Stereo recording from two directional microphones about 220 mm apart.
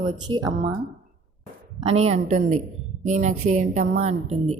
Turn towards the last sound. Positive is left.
turn(degrees=-30)  # may be behind; listen again after turning